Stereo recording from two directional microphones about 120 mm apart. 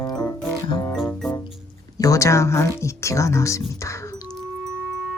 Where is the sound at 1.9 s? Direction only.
30° left (ahead or behind).